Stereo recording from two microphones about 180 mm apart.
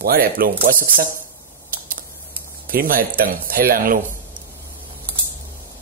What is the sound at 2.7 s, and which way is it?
Speech, 55° right (ahead or behind).